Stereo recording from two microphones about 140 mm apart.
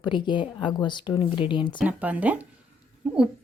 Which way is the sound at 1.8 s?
10° right (ahead or behind).